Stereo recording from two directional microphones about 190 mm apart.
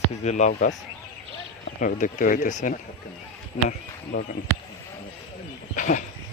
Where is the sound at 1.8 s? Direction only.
45° left (ahead or behind).